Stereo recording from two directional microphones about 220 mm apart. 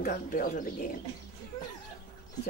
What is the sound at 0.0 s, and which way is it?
Speech, 40° left (ahead or behind).